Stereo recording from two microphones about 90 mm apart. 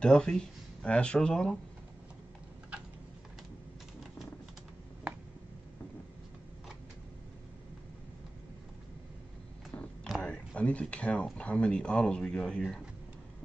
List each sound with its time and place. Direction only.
0.0 s speech: 10° left (ahead or behind)
10.2 s speech: 10° left (ahead or behind)